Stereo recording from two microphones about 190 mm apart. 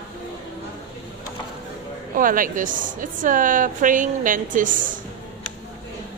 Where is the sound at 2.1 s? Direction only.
45° right (ahead or behind).